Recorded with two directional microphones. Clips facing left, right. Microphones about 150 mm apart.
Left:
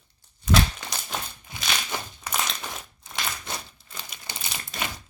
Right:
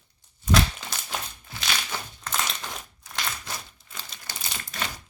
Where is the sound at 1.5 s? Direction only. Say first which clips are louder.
Left 1 dB; 15° left (ahead or behind).